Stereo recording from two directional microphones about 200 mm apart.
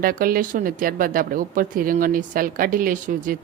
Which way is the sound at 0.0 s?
45° right (ahead or behind).